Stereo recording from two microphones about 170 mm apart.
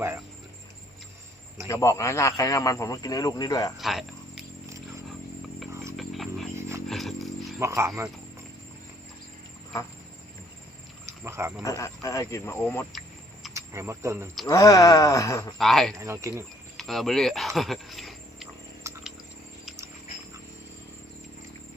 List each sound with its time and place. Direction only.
1.6 s speech: 20° left (ahead or behind)
3.8 s cricket: centre (ahead or behind)
6.0 s a sound: centre (ahead or behind)
6.6 s a sound: 15° right (ahead or behind)
6.8 s a sound: centre (ahead or behind)
7.6 s speech: 15° right (ahead or behind)
11.0 s wild animals: 15° right (ahead or behind)
11.6 s speech: 20° left (ahead or behind)
13.5 s speech: 15° right (ahead or behind)
14.4 s speech: 20° left (ahead or behind)
15.5 s speech: centre (ahead or behind)
16.0 s speech: 15° right (ahead or behind)
16.7 s cricket: centre (ahead or behind)